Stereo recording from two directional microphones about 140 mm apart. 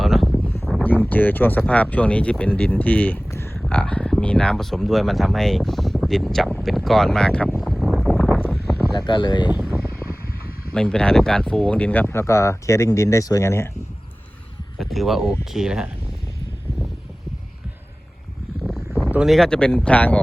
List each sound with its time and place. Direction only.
0.0 s a sound: centre (ahead or behind)
0.9 s speech: 10° left (ahead or behind)
7.6 s wind noise: centre (ahead or behind)
8.9 s speech: 30° left (ahead or behind)
10.8 s speech: 5° left (ahead or behind)
14.8 s speech: centre (ahead or behind)
18.6 s a sound: centre (ahead or behind)
19.1 s speech: centre (ahead or behind)